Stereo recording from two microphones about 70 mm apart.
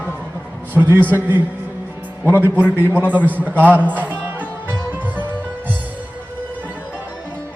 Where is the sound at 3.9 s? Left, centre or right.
Right.